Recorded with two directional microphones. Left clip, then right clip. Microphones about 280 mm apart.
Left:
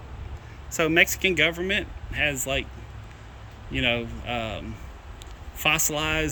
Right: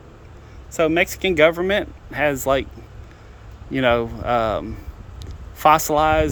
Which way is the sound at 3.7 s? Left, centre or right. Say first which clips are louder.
Right 7 dB; centre.